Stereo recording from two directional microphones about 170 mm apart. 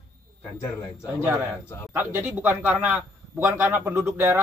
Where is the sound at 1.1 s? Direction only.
15° right (ahead or behind).